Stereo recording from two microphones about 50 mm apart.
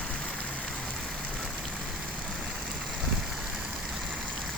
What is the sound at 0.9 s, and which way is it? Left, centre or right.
Rain, centre.